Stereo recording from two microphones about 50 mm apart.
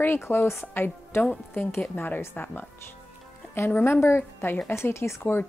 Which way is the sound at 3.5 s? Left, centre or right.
Left.